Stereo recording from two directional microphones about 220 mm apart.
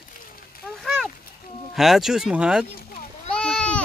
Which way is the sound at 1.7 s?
Centre (ahead or behind).